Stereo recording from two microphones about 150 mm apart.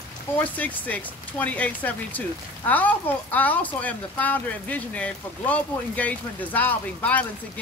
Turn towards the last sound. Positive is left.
turn(degrees=10)  # may be behind; listen again after turning